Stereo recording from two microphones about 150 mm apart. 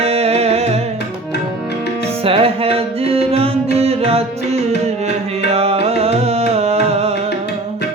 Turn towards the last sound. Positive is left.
turn(degrees=-45)  # may be behind; listen again after turning